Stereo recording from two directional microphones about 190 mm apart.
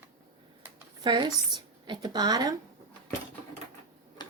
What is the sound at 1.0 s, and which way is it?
Speech, 25° right (ahead or behind).